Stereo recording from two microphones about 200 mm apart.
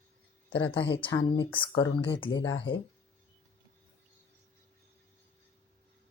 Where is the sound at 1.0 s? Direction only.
25° left (ahead or behind).